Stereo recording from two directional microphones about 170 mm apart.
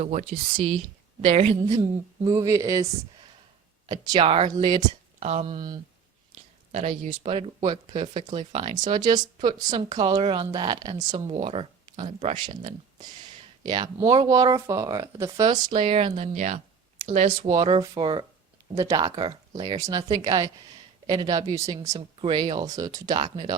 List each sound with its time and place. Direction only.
0.0 s speech: 45° right (ahead or behind)
1.7 s speech: 20° right (ahead or behind)
4.2 s speech: 35° right (ahead or behind)
4.4 s speech: 25° right (ahead or behind)
5.2 s speech: 40° right (ahead or behind)
5.5 s speech: 25° right (ahead or behind)
6.7 s speech: 45° right (ahead or behind); by 11.2 s 25° right (ahead or behind)
11.2 s speech: 40° right (ahead or behind)
12.5 s speech: 25° right (ahead or behind); by 16.6 s 45° right (ahead or behind)
17.1 s speech: 35° right (ahead or behind)